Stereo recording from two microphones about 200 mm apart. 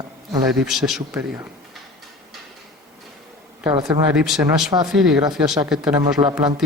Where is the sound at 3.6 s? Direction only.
20° right (ahead or behind).